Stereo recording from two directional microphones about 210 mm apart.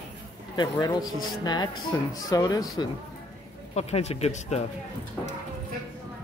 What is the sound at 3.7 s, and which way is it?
Speech, 30° left (ahead or behind).